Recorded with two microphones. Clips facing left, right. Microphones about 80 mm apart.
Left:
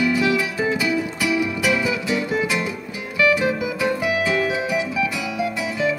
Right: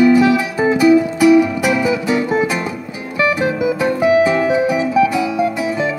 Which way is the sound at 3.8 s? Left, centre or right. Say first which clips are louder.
Right 10 dB; right.